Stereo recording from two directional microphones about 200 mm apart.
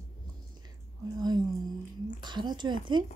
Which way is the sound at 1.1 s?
20° right (ahead or behind).